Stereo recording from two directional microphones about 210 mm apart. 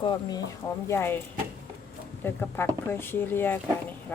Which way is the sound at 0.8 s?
10° left (ahead or behind).